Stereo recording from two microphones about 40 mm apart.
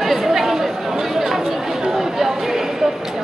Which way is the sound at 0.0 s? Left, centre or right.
Centre.